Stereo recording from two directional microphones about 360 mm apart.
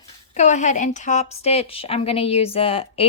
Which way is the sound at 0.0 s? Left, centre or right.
Centre.